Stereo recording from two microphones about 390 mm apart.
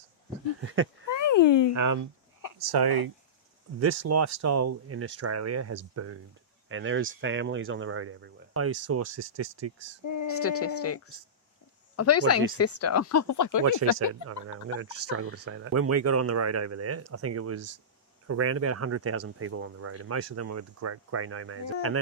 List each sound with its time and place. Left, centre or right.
1.1 s a sound: left
1.7 s speech: right
2.6 s speech: right
3.8 s speech: right
9.7 s speech: right
10.2 s speech: left
14.1 s speech: right